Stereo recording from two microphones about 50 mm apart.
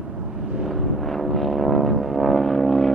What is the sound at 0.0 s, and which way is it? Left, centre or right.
Vehicle, centre.